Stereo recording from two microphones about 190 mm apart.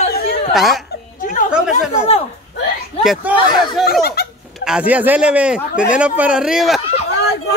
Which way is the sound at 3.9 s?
55° left (ahead or behind).